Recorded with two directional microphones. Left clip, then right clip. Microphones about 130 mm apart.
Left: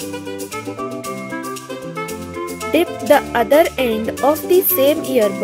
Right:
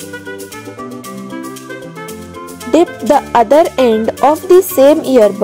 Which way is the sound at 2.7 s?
40° right (ahead or behind).